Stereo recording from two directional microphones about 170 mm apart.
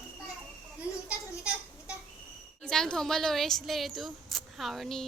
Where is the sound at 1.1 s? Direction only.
5° right (ahead or behind).